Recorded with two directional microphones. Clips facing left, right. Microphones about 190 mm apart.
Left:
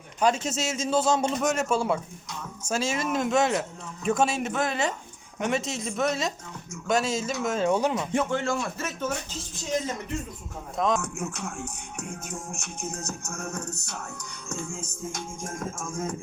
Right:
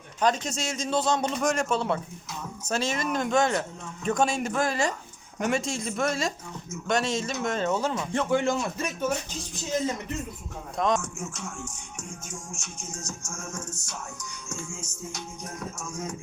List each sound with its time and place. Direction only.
0.2 s a man's voice: 10° left (ahead or behind)
8.3 s speech: 15° right (ahead or behind)
10.8 s a man's voice: centre (ahead or behind)
11.0 s music: 60° left (ahead or behind)